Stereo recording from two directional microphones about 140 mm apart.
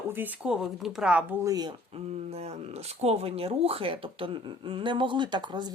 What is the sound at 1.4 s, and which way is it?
Speech, 25° right (ahead or behind).